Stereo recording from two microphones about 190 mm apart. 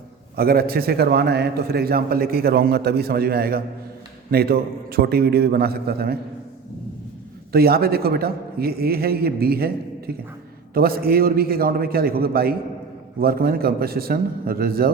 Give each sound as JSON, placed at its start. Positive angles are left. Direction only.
{"t": 0.3, "sound": "a man's voice", "side_deg": -55}
{"t": 7.5, "sound": "a man's voice", "side_deg": -55}